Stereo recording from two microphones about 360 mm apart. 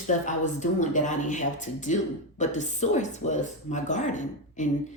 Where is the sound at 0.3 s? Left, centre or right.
Centre.